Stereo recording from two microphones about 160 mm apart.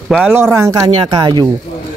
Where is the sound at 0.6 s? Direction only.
20° right (ahead or behind).